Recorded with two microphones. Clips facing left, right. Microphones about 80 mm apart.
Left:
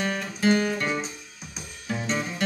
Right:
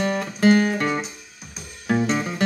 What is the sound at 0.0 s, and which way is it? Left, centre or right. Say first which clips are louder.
Music: right 5 dB; right.